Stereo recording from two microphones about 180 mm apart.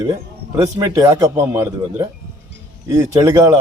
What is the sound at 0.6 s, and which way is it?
A man's voice, 15° right (ahead or behind).